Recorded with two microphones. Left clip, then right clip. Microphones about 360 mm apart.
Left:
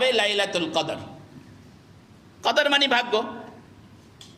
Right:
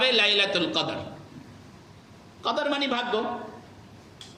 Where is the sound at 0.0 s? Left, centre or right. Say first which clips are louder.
Even; centre.